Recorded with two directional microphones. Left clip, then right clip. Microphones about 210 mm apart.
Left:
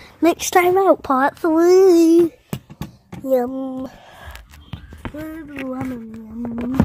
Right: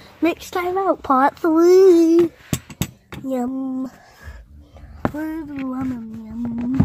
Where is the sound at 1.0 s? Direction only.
Centre (ahead or behind); by 2.3 s 15° left (ahead or behind).